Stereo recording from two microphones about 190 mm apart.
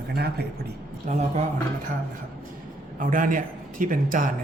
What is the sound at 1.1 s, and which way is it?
Speech, 35° right (ahead or behind).